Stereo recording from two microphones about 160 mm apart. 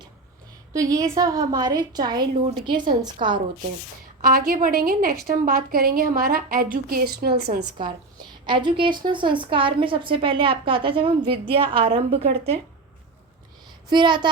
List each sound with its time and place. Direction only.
0.7 s a woman's voice: 20° right (ahead or behind)
4.2 s a woman's voice: 65° right (ahead or behind); by 7.6 s 85° right
7.8 s a woman's voice: 30° right (ahead or behind)
13.9 s a woman's voice: 30° right (ahead or behind)